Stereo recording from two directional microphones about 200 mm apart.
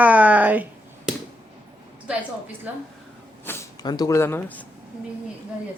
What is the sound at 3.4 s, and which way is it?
Speech, 15° left (ahead or behind).